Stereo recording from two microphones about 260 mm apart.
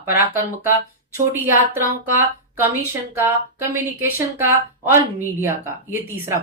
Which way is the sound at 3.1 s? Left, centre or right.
Centre.